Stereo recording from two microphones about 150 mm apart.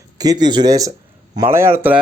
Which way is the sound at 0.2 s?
25° right (ahead or behind).